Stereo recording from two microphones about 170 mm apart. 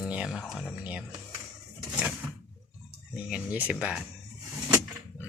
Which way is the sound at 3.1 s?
10° right (ahead or behind).